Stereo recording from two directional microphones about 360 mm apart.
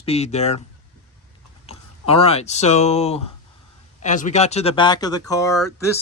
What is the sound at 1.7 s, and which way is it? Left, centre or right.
Speech, centre.